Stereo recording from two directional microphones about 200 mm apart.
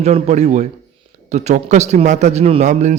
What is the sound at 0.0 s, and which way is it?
A man's voice, 35° right (ahead or behind).